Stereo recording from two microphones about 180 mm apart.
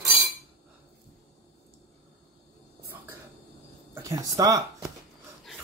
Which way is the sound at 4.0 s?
20° right (ahead or behind).